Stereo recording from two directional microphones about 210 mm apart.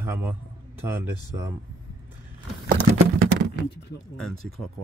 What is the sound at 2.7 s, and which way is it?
Patter, 50° right (ahead or behind).